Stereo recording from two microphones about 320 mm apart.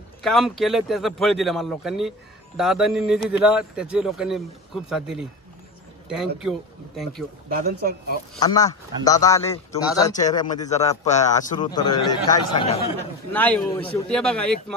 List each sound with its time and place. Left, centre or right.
0.2 s speech: centre
7.5 s speech: right
8.5 s speech: centre
10.1 s speech: left
13.3 s speech: centre